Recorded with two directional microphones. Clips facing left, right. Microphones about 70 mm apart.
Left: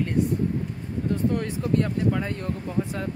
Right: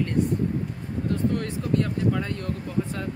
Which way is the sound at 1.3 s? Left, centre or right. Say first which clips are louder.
Left 1 dB; left.